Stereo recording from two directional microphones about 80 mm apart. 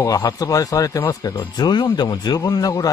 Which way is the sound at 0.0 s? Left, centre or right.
Left.